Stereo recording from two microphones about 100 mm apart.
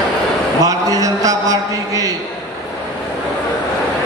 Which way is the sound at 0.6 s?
35° right (ahead or behind).